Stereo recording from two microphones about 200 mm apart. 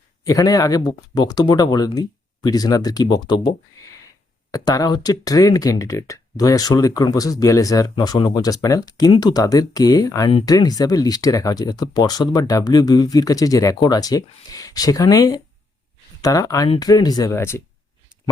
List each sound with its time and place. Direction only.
0.3 s speech: 20° left (ahead or behind)
4.5 s speech: 20° left (ahead or behind)
16.6 s speech: 30° left (ahead or behind); by 17.6 s 15° left (ahead or behind)